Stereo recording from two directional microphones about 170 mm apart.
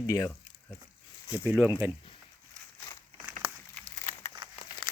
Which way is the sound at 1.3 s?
10° right (ahead or behind).